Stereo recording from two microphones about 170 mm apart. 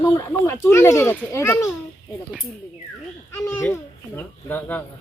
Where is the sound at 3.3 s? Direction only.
15° left (ahead or behind).